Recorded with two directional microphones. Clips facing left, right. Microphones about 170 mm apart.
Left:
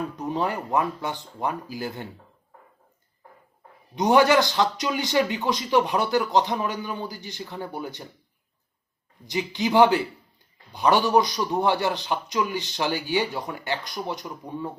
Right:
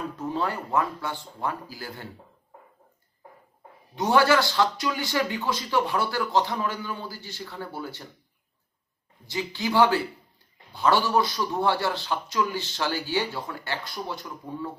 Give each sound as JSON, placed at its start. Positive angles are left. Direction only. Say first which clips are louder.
{"t": 0.2, "sound": "a man's voice", "louder": "left 1 dB", "side_deg": 20}
{"t": 3.9, "sound": "speech", "louder": "left 3 dB", "side_deg": 20}
{"t": 9.2, "sound": "a man's voice", "louder": "left 3 dB", "side_deg": 20}